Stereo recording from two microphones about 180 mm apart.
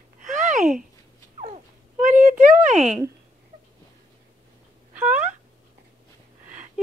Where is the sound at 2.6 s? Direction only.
40° right (ahead or behind).